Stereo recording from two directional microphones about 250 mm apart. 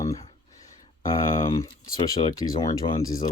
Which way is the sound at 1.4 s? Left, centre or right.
Left.